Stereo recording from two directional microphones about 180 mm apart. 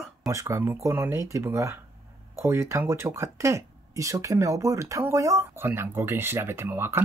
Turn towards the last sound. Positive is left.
turn(degrees=-10)  # may be behind; listen again after turning